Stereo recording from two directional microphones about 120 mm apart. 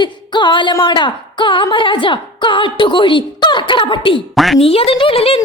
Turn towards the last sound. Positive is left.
turn(degrees=50)  # may be behind; listen again after turning